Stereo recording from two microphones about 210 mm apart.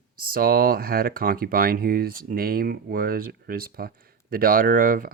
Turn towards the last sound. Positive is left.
turn(degrees=-40)  # may be behind; listen again after turning